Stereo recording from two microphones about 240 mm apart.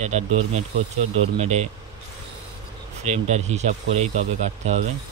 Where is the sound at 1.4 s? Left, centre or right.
Right.